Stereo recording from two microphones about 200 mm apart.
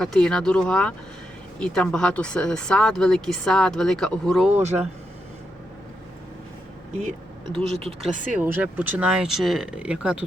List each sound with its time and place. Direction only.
0.0 s speech: 5° left (ahead or behind)
7.5 s speech: 30° right (ahead or behind)
8.2 s speech: 5° right (ahead or behind)